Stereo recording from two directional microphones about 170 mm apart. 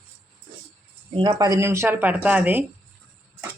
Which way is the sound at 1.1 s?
25° right (ahead or behind).